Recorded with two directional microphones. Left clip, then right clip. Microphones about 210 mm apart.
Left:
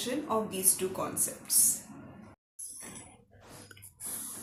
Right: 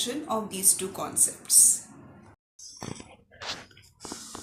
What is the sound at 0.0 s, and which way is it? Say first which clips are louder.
Speech: right 2 dB; 5° left (ahead or behind).